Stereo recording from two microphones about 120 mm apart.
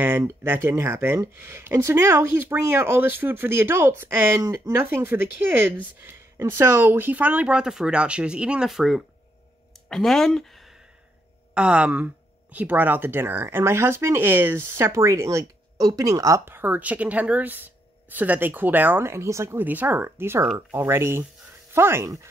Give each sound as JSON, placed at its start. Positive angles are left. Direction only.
{"t": 0.2, "sound": "speech", "side_deg": -20}
{"t": 11.5, "sound": "speech", "side_deg": -10}